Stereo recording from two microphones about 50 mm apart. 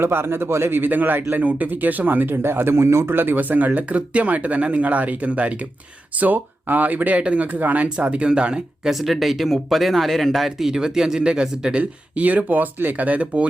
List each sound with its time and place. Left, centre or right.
0.0 s a man's voice: right
2.3 s speech: right
3.2 s speech: right
6.1 s speech: right
7.9 s speech: right
8.9 s speech: centre
11.8 s speech: right